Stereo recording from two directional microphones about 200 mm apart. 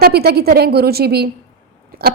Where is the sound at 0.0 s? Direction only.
50° right (ahead or behind).